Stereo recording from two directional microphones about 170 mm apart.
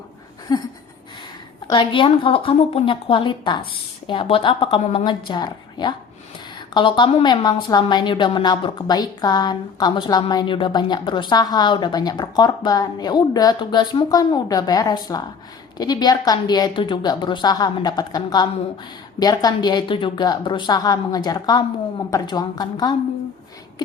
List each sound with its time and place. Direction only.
0.5 s a woman's voice: 25° left (ahead or behind)